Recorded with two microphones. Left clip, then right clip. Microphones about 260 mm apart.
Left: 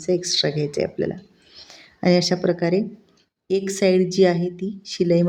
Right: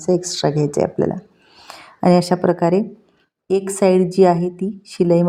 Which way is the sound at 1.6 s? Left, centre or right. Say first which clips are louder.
Right 7 dB; centre.